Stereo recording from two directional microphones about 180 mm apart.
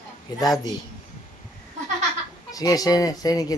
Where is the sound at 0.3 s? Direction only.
20° left (ahead or behind).